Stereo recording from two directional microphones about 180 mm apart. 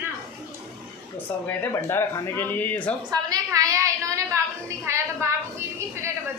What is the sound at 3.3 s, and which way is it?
A woman's voice, 20° right (ahead or behind).